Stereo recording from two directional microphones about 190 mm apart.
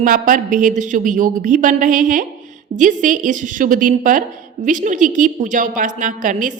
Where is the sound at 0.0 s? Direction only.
45° right (ahead or behind).